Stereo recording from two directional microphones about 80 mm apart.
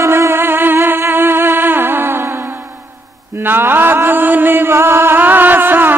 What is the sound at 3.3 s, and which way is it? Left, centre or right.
Mantra, right.